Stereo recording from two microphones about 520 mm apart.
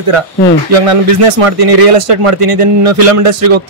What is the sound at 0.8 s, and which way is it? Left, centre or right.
A man's voice, right.